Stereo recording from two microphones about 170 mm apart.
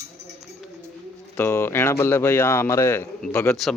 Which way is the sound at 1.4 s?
15° left (ahead or behind).